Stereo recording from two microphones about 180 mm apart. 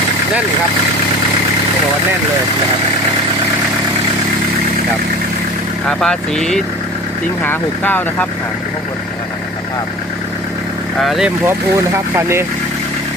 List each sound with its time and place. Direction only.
6.0 s speech: 5° left (ahead or behind)
11.0 s speech: centre (ahead or behind)
11.4 s speech: 15° right (ahead or behind)